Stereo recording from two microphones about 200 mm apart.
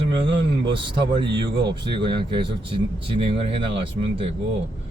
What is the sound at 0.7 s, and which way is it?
Speech, 25° right (ahead or behind).